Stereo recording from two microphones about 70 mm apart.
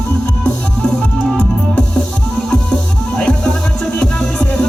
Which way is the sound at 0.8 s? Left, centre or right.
Centre.